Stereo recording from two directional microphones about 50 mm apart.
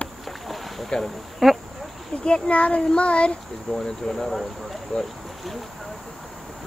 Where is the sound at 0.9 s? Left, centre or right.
Centre.